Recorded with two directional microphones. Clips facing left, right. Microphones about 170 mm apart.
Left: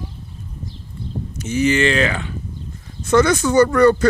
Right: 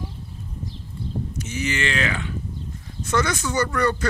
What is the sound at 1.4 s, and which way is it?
Speech, 30° left (ahead or behind).